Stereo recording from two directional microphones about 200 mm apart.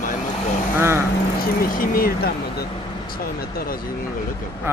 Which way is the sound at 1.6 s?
45° left (ahead or behind).